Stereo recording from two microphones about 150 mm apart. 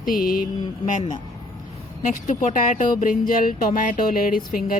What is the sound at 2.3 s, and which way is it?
Speech, 65° left (ahead or behind).